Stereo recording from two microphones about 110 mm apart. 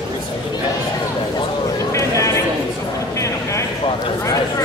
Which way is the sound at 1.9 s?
25° left (ahead or behind).